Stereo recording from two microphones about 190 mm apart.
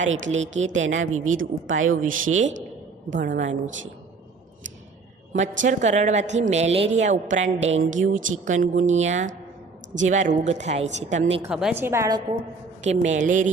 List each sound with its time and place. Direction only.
0.0 s speech: 85° right
1.1 s a woman's voice: 40° right (ahead or behind)
1.4 s speech: 90° right
1.8 s a woman's voice: 45° right (ahead or behind)
5.6 s a woman's voice: 40° right (ahead or behind)
11.4 s a woman's voice: 5° right (ahead or behind)
12.8 s a woman's voice: 35° right (ahead or behind)